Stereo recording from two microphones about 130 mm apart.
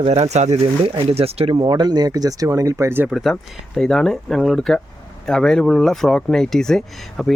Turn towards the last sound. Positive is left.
turn(degrees=0)  # may be behind; listen again after turning